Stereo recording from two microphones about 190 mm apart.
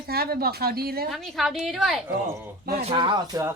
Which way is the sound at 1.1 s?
Centre (ahead or behind).